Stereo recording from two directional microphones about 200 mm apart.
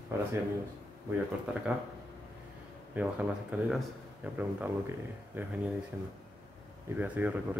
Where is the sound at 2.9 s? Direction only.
5° right (ahead or behind).